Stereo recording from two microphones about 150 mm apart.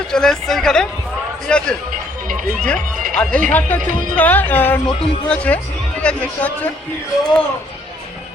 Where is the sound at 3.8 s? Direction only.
60° right (ahead or behind).